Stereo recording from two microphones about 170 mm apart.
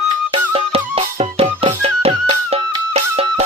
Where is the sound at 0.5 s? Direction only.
35° right (ahead or behind).